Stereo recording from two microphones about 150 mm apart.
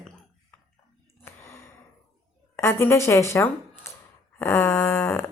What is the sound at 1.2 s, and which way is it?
Gasp, 15° left (ahead or behind).